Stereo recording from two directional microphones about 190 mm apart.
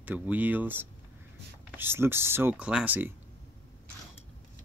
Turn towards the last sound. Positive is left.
turn(degrees=-10)  # may be behind; listen again after turning